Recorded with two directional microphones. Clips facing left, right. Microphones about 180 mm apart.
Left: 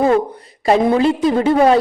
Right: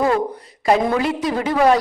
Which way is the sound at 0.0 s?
25° left (ahead or behind).